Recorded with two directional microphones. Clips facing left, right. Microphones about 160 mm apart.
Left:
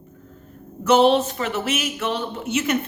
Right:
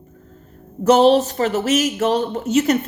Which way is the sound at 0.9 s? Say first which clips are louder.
Right 3 dB; 40° right (ahead or behind).